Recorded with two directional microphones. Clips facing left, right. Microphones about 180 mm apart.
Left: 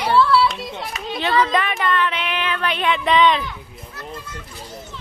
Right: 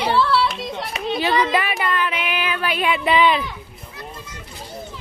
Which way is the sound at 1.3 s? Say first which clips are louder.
Left 3 dB; 10° right (ahead or behind).